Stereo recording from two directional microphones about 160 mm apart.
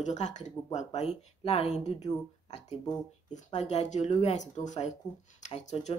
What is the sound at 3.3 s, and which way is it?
Speech, 45° left (ahead or behind).